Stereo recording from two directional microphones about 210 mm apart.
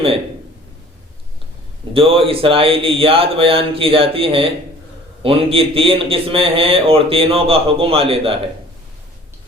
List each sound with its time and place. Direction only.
1.9 s a man's voice: 25° right (ahead or behind)